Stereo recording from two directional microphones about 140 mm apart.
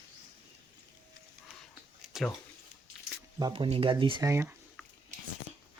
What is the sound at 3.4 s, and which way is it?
Speech, 35° right (ahead or behind).